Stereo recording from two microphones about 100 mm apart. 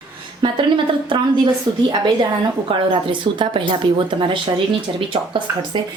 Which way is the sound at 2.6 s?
60° right (ahead or behind).